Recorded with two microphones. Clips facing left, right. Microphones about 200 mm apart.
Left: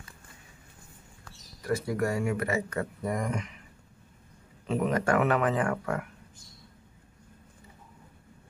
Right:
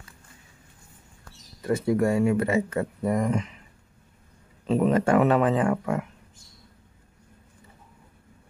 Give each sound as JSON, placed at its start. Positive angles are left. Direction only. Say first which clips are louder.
{"t": 1.6, "sound": "speech", "louder": "right 6 dB", "side_deg": -25}
{"t": 4.6, "sound": "speech", "louder": "right 5 dB", "side_deg": -30}